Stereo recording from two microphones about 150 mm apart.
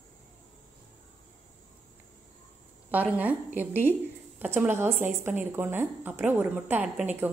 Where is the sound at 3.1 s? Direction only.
10° right (ahead or behind).